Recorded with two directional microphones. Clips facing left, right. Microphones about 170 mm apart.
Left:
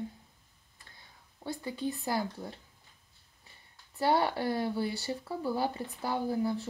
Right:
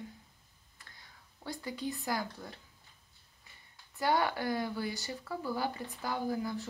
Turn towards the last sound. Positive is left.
turn(degrees=30)  # may be behind; listen again after turning